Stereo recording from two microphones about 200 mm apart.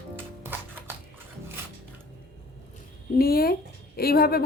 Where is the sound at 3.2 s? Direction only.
50° left (ahead or behind).